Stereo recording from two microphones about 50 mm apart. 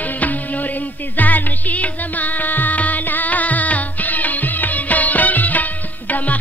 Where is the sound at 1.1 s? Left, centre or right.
Left.